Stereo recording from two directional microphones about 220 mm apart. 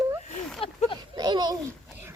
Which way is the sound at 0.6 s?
25° left (ahead or behind).